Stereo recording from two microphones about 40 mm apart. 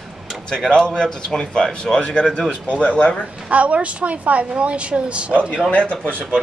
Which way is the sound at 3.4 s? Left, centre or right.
Right.